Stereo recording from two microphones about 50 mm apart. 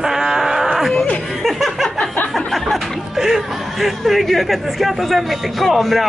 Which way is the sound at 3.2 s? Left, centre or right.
Centre.